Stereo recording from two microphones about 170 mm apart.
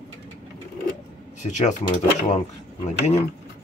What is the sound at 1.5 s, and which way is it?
Speech, 45° left (ahead or behind).